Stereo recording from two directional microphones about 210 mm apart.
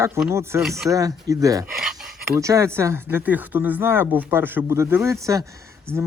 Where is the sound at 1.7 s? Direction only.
Centre (ahead or behind).